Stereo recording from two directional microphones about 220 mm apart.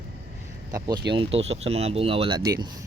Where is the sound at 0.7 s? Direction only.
20° right (ahead or behind).